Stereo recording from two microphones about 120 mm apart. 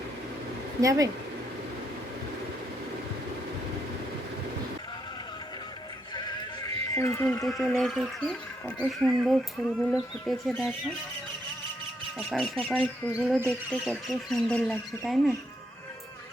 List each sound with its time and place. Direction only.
0.8 s speech: 30° right (ahead or behind)
6.1 s music: 35° left (ahead or behind)
6.9 s speech: 25° left (ahead or behind)
7.4 s speech: centre (ahead or behind)
8.2 s speech: 10° left (ahead or behind)
12.3 s speech: 5° left (ahead or behind)